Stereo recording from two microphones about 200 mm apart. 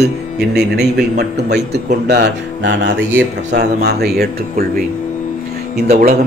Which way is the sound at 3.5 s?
55° right (ahead or behind).